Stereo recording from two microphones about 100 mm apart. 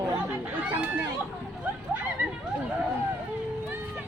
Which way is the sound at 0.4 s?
20° right (ahead or behind).